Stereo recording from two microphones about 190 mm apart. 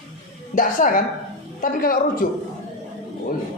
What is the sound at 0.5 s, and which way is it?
A man's voice, 45° left (ahead or behind).